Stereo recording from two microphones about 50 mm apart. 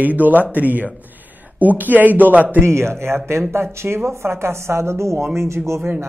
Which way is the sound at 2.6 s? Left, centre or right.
Right.